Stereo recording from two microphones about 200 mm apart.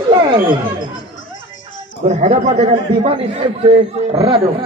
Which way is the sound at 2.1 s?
40° right (ahead or behind).